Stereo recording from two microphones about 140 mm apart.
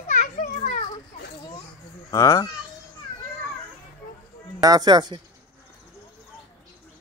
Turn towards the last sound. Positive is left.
turn(degrees=-30)  # may be behind; listen again after turning